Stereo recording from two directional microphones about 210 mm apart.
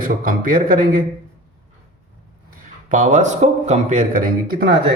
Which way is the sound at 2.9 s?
35° right (ahead or behind).